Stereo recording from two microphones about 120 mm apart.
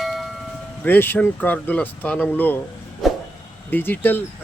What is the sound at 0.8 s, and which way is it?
Speech, 15° left (ahead or behind).